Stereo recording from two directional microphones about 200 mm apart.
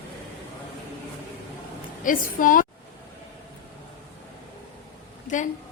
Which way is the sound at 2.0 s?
40° left (ahead or behind).